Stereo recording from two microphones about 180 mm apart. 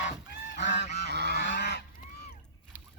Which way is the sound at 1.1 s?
65° right (ahead or behind).